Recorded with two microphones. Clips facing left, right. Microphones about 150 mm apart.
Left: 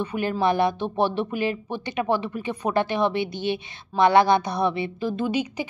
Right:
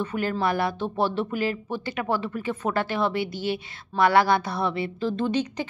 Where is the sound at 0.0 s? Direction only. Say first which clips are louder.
Left 2 dB; 15° left (ahead or behind).